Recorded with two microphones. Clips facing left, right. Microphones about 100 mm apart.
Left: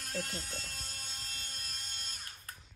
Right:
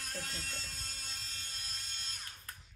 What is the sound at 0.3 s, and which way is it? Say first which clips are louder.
Speech: left 2 dB; 45° left (ahead or behind).